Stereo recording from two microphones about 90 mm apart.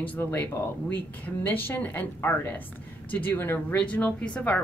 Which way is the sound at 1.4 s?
20° left (ahead or behind).